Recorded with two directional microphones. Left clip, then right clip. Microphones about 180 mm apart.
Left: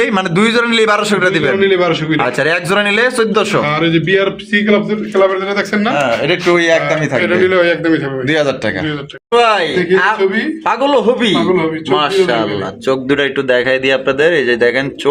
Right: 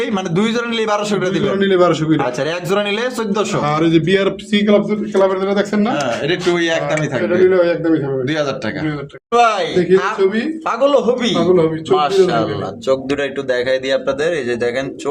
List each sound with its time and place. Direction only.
0.0 s a man's voice: 15° left (ahead or behind)
1.6 s a man's voice: 55° right (ahead or behind)
2.1 s a man's voice: 20° left (ahead or behind)
3.6 s speech: 45° right (ahead or behind)
5.2 s speech: 25° right (ahead or behind)
5.9 s a man's voice: 15° left (ahead or behind)
7.3 s a man's voice: 10° right (ahead or behind)
8.3 s speech: 25° left (ahead or behind)